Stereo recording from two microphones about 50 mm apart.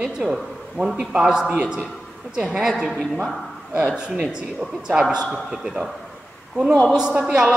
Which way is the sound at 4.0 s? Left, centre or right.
Centre.